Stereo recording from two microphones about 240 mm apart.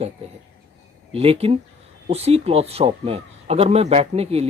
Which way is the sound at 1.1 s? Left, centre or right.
Right.